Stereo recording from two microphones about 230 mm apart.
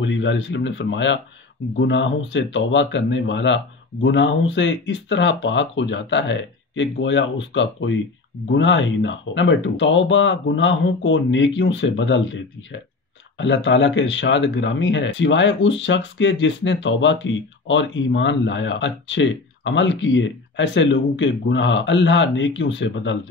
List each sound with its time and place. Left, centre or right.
0.0 s speech: left